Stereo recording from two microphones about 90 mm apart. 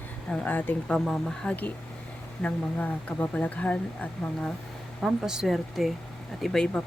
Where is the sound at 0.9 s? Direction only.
5° left (ahead or behind).